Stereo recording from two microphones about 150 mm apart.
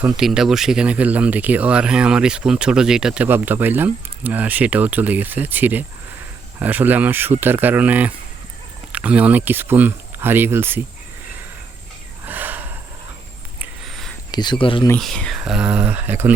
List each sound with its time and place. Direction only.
0.0 s speech: 5° right (ahead or behind)
12.2 s gasp: 10° right (ahead or behind)
13.8 s a sound: centre (ahead or behind)
14.3 s speech: 30° left (ahead or behind)
14.9 s speech: 5° left (ahead or behind); by 16.3 s 10° right (ahead or behind)